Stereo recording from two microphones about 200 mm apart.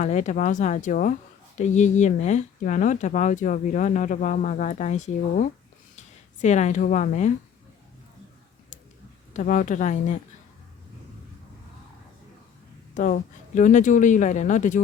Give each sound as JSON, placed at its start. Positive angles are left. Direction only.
{"t": 0.0, "sound": "speech", "side_deg": 35}
{"t": 9.3, "sound": "speech", "side_deg": 40}
{"t": 12.9, "sound": "speech", "side_deg": 40}